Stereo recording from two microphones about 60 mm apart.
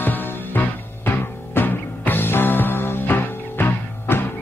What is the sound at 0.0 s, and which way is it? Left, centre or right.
Music, left.